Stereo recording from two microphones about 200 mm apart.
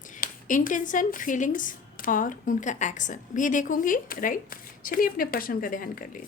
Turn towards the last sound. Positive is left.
turn(degrees=45)  # may be behind; listen again after turning